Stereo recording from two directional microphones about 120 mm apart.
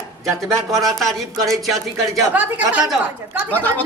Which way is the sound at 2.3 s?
15° right (ahead or behind).